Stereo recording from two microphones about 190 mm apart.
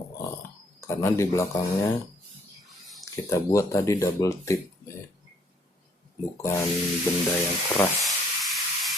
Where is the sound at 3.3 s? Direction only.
15° left (ahead or behind).